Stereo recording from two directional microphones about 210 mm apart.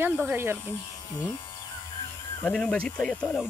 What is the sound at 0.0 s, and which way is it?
Speech, 10° right (ahead or behind).